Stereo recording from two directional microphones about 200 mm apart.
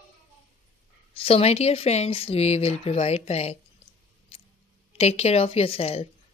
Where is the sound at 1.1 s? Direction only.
30° left (ahead or behind).